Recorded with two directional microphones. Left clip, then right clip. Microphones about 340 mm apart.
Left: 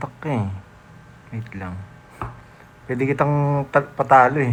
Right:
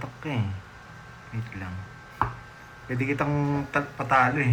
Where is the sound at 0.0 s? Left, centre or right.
Centre.